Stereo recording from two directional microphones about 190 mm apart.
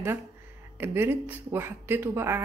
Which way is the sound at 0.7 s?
10° right (ahead or behind).